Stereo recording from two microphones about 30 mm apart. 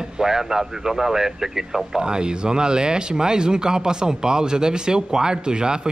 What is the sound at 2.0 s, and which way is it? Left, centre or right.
Speech, right.